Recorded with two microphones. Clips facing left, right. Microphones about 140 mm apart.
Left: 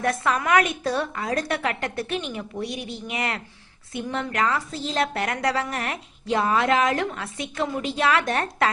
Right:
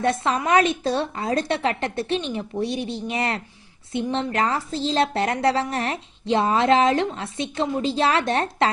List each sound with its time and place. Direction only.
0.0 s a woman's voice: 25° right (ahead or behind)